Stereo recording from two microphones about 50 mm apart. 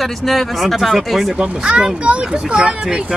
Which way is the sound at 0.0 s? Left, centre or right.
Centre.